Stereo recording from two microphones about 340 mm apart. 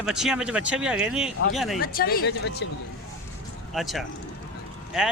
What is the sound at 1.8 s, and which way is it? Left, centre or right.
Speech, left.